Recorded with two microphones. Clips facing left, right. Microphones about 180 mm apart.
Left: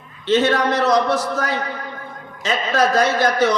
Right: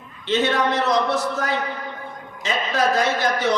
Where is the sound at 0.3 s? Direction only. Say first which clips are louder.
Left 4 dB; 40° left (ahead or behind).